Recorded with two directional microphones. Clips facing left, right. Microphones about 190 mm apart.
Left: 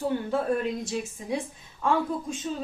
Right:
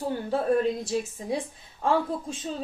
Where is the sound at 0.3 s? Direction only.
35° right (ahead or behind).